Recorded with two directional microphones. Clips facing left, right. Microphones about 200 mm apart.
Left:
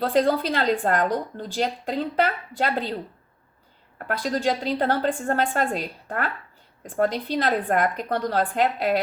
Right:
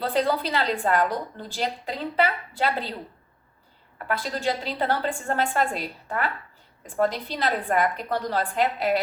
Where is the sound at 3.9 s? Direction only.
50° left (ahead or behind).